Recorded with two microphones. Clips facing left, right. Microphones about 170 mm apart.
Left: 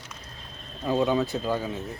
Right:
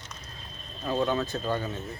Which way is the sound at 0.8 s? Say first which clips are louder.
Left 3 dB; 15° left (ahead or behind).